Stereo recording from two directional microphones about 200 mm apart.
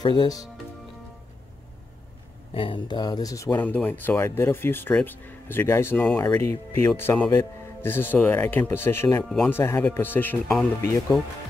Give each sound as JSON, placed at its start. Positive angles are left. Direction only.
{"t": 0.0, "sound": "speech", "side_deg": 25}
{"t": 2.5, "sound": "speech", "side_deg": 25}